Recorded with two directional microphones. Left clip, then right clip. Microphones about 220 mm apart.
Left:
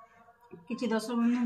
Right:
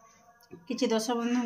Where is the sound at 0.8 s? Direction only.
40° right (ahead or behind).